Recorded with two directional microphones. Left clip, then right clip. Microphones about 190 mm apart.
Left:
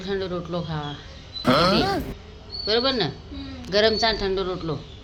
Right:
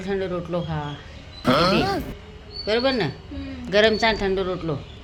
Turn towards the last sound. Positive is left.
turn(degrees=-10)  # may be behind; listen again after turning